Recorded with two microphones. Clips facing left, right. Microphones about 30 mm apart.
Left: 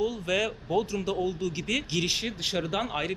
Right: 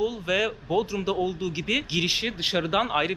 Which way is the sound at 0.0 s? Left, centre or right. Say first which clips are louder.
Right 2 dB; centre.